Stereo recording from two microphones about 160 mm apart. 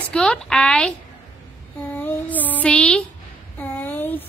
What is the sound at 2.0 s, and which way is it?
Music, 10° left (ahead or behind).